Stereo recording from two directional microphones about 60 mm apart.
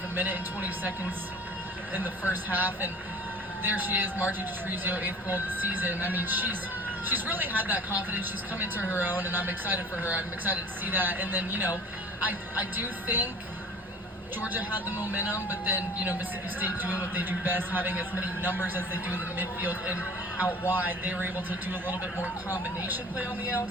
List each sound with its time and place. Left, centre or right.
0.2 s speech: right
14.4 s speech: right